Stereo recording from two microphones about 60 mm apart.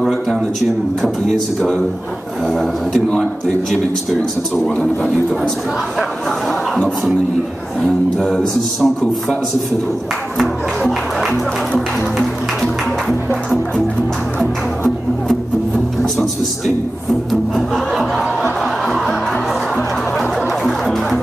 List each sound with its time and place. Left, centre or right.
1.0 s music: centre
2.4 s a man's voice: centre
4.6 s a man's voice: centre
7.8 s a man's voice: centre
16.0 s music: centre
20.2 s music: centre